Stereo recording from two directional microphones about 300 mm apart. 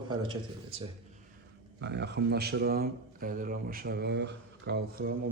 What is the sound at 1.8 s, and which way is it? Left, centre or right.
A man's voice, right.